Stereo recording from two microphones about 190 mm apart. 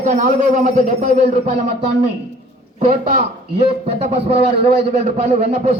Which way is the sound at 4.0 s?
30° right (ahead or behind).